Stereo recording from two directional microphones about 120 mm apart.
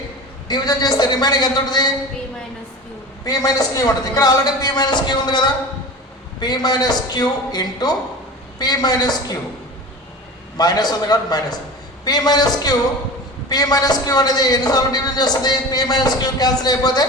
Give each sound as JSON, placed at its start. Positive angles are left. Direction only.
{"t": 0.4, "sound": "a man's voice", "side_deg": 35}
{"t": 3.2, "sound": "a man's voice", "side_deg": 30}
{"t": 10.6, "sound": "a man's voice", "side_deg": 35}